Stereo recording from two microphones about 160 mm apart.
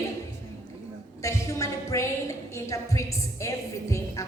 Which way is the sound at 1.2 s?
20° left (ahead or behind).